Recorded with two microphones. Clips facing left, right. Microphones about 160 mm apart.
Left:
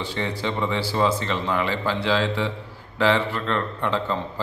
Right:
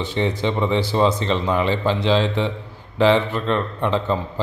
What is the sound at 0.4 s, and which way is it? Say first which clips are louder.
A man's voice: right 3 dB; 20° right (ahead or behind).